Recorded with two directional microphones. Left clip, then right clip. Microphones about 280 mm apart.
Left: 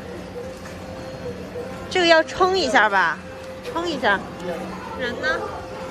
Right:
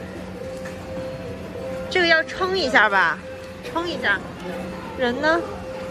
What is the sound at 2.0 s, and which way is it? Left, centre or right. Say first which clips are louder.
A woman's voice: left 3 dB; centre.